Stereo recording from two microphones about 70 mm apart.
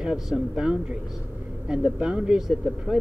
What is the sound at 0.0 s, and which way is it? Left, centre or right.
Speech, centre.